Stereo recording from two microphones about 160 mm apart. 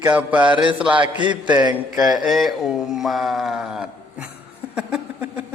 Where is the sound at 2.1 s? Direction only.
Centre (ahead or behind).